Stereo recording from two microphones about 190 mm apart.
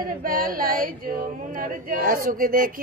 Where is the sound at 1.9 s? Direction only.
45° right (ahead or behind).